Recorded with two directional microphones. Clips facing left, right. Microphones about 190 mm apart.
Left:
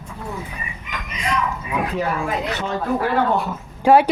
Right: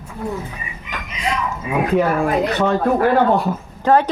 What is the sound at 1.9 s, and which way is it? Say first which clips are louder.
Speech: right 9 dB; 60° right (ahead or behind).